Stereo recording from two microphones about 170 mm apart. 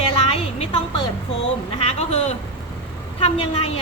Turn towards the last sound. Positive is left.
turn(degrees=35)  # may be behind; listen again after turning